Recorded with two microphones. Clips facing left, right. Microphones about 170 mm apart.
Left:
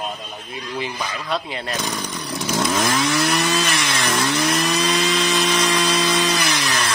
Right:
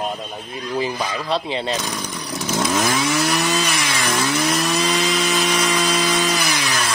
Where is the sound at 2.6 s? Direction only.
10° right (ahead or behind).